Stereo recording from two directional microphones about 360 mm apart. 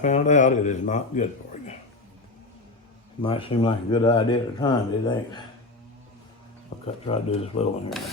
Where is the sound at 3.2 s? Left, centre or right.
Centre.